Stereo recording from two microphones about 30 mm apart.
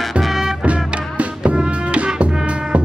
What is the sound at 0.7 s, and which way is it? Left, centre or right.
Music, right.